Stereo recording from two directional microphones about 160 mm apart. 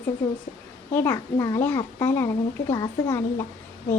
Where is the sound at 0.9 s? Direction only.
15° left (ahead or behind).